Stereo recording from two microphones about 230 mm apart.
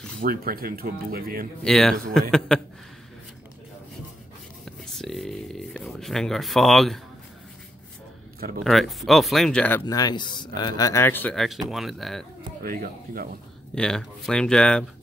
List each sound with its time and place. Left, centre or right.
0.2 s speech: right
1.6 s speech: centre
4.6 s speech: centre
8.6 s speech: centre
12.6 s speech: right
13.7 s speech: centre